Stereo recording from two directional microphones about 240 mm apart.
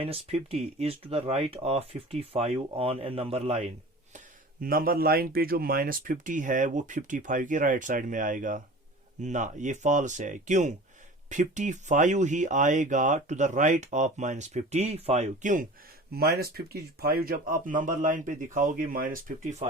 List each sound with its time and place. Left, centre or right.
0.0 s speech: right
4.6 s speech: right